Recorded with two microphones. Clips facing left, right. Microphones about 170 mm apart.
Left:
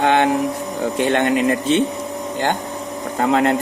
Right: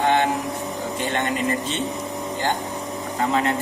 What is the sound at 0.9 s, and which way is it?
Speech, 65° left (ahead or behind).